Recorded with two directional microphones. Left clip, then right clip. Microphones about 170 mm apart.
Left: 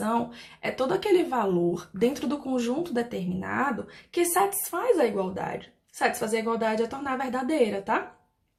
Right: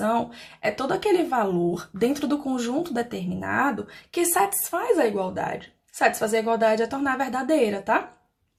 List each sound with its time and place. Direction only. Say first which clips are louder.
0.0 s speech: right 4 dB; 25° right (ahead or behind)